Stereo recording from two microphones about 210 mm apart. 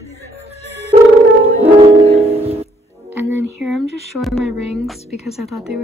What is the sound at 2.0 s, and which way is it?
Music, 30° right (ahead or behind).